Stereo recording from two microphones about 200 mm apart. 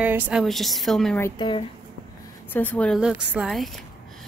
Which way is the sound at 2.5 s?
5° left (ahead or behind).